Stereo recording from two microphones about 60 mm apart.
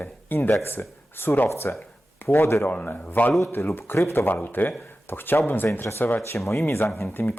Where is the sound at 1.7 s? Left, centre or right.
Left.